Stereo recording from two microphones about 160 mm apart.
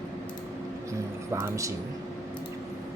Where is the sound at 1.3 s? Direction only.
20° right (ahead or behind).